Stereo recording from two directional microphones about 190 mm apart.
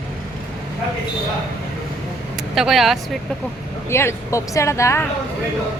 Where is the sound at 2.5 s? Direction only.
Centre (ahead or behind).